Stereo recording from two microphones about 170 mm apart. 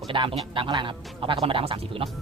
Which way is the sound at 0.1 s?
30° right (ahead or behind).